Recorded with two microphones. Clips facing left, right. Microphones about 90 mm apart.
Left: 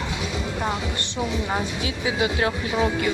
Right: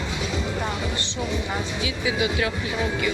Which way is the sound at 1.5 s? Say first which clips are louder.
Left 1 dB; 40° left (ahead or behind).